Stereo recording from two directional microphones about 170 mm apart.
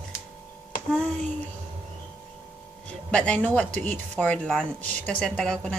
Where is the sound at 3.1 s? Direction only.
5° left (ahead or behind).